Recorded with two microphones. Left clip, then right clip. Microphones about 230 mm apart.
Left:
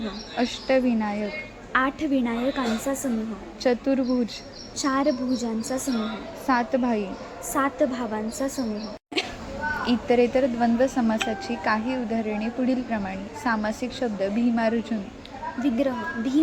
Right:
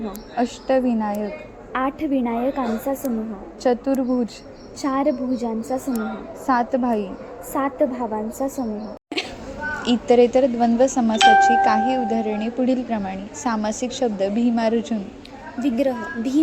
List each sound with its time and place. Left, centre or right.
0.3 s a woman's voice: centre
9.2 s a sound: centre
9.8 s a woman's voice: centre